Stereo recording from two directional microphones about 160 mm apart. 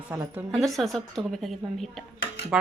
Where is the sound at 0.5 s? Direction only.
Centre (ahead or behind).